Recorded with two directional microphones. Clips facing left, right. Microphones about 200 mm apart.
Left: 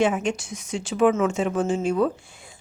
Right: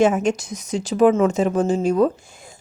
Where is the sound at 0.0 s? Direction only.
45° right (ahead or behind).